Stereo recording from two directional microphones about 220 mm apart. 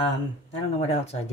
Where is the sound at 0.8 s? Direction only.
30° left (ahead or behind).